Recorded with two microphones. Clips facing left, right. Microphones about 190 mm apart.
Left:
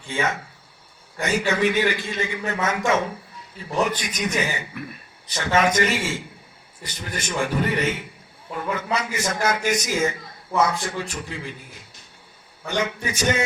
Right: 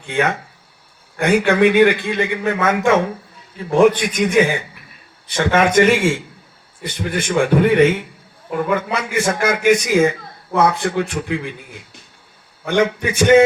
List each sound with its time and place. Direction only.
0.1 s a man's voice: 65° right (ahead or behind)
12.6 s a man's voice: 55° right (ahead or behind)